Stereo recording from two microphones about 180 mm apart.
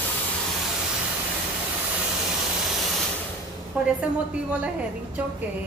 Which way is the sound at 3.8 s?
5° right (ahead or behind).